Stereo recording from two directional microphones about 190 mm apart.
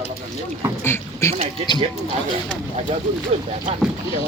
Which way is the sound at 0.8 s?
15° left (ahead or behind).